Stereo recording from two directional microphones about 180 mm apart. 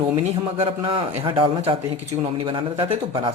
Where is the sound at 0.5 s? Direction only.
30° right (ahead or behind).